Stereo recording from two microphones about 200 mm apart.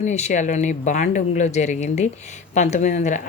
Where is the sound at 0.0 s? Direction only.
35° left (ahead or behind).